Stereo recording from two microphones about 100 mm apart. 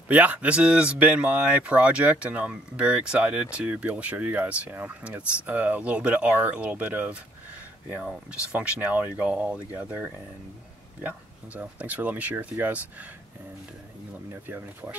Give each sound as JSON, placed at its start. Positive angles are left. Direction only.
{"t": 0.1, "sound": "speech", "side_deg": -15}
{"t": 11.5, "sound": "speech", "side_deg": -15}
{"t": 14.3, "sound": "speech", "side_deg": -20}